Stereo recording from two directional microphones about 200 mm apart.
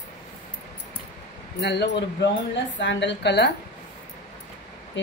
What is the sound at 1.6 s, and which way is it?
Speech, 60° left (ahead or behind).